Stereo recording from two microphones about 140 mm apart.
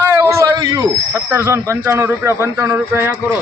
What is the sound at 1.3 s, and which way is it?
Speech, 20° right (ahead or behind).